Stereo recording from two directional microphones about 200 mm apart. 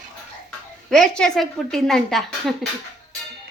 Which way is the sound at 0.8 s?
5° left (ahead or behind).